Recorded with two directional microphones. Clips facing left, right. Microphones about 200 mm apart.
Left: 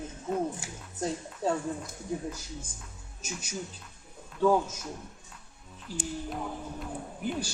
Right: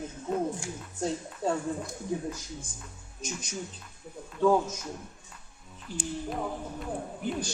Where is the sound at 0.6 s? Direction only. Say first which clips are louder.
Right 6 dB; 5° left (ahead or behind).